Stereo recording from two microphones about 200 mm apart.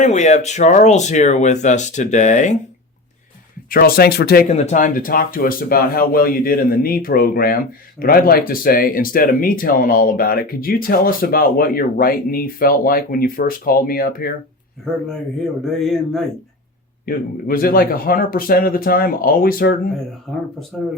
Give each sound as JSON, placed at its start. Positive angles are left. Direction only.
{"t": 0.0, "sound": "speech", "side_deg": 35}
{"t": 3.7, "sound": "speech", "side_deg": 50}
{"t": 4.4, "sound": "speech", "side_deg": 35}
{"t": 15.6, "sound": "speech", "side_deg": 0}
{"t": 17.1, "sound": "speech", "side_deg": 45}
{"t": 20.3, "sound": "speech", "side_deg": 0}